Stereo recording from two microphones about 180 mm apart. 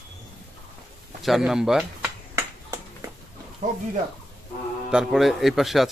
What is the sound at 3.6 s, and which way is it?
Speech, 40° right (ahead or behind).